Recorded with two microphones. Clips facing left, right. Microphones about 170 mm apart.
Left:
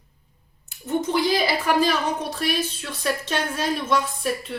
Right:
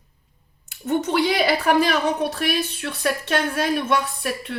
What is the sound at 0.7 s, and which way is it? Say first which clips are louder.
A woman's voice: right 2 dB; 70° right (ahead or behind).